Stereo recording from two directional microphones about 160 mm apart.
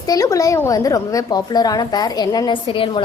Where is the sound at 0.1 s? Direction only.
20° left (ahead or behind).